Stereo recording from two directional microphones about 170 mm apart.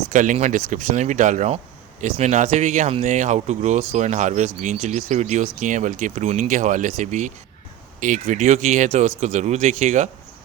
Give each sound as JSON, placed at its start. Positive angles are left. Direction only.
{"t": 0.1, "sound": "speech", "side_deg": -50}